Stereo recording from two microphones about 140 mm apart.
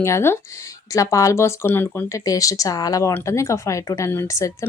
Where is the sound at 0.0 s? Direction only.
20° left (ahead or behind).